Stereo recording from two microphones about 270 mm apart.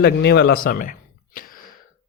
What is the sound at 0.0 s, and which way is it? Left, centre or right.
Speech, left.